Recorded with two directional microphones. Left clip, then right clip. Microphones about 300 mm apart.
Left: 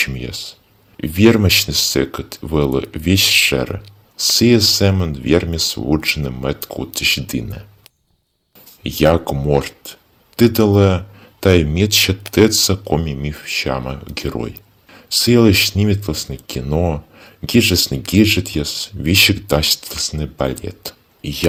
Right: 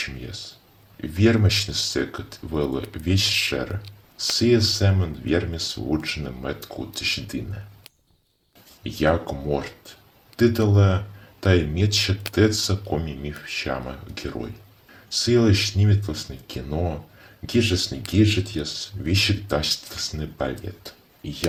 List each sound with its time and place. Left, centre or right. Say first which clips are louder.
0.0 s speech: left 11 dB; left
8.8 s speech: left 8 dB; left